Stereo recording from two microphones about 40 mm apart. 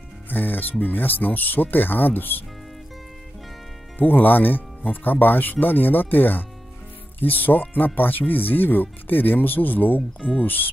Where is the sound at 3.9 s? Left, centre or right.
Left.